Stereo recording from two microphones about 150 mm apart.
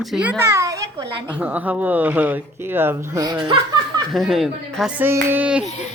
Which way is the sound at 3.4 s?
35° right (ahead or behind).